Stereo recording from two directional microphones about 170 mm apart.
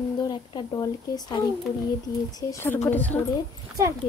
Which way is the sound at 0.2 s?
25° left (ahead or behind).